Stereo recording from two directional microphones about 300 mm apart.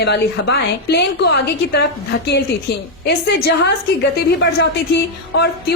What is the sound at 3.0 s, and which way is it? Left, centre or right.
A woman's voice, left.